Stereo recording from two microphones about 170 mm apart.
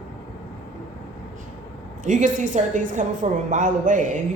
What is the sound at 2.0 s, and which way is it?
Speech, 45° right (ahead or behind).